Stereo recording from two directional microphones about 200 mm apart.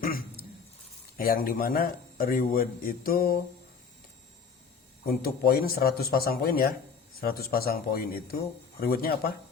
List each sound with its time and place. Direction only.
0.0 s dog: 45° left (ahead or behind)
1.1 s a man's voice: 45° left (ahead or behind)
5.0 s a man's voice: 50° left (ahead or behind)